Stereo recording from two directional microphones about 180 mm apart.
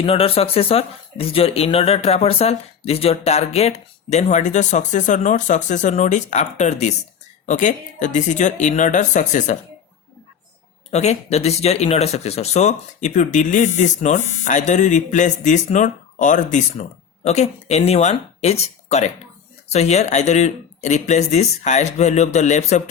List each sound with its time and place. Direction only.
0.0 s speech: 30° left (ahead or behind)
10.9 s speech: 40° left (ahead or behind)